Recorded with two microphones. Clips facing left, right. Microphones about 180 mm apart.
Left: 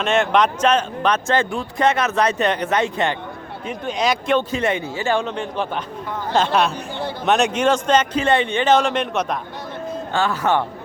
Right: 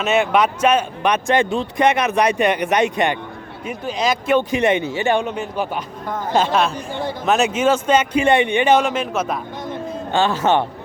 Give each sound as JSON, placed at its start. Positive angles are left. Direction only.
{"t": 0.0, "sound": "speech", "side_deg": -5}
{"t": 3.7, "sound": "speech", "side_deg": 0}
{"t": 4.4, "sound": "a man's voice", "side_deg": -15}
{"t": 10.1, "sound": "a man's voice", "side_deg": -25}